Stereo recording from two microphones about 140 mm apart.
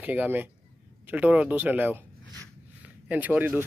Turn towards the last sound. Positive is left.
turn(degrees=-10)  # may be behind; listen again after turning